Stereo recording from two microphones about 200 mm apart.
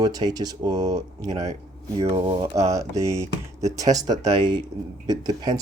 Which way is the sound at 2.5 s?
15° right (ahead or behind).